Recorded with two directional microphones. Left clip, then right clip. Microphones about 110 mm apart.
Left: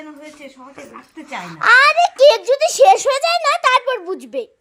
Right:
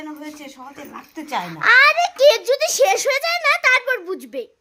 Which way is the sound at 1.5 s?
15° left (ahead or behind).